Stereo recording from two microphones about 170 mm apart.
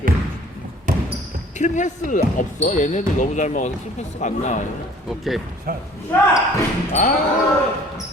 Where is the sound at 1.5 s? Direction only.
45° left (ahead or behind).